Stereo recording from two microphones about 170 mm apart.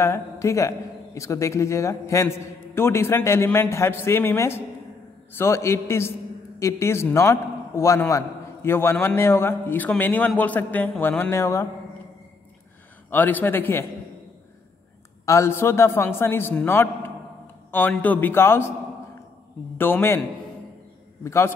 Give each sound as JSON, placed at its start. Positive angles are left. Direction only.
{"t": 0.0, "sound": "a man's voice", "side_deg": 15}
{"t": 13.1, "sound": "a man's voice", "side_deg": 10}
{"t": 15.2, "sound": "a man's voice", "side_deg": 15}
{"t": 19.8, "sound": "a man's voice", "side_deg": 15}
{"t": 21.2, "sound": "a man's voice", "side_deg": 15}